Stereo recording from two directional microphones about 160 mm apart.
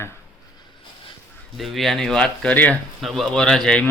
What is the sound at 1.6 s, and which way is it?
A woman's voice, centre (ahead or behind).